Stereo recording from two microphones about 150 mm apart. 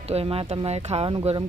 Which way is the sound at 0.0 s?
40° right (ahead or behind).